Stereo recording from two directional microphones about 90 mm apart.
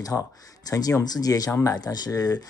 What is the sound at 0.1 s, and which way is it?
Speech, 35° left (ahead or behind).